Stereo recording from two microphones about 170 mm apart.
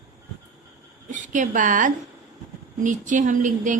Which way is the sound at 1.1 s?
50° right (ahead or behind).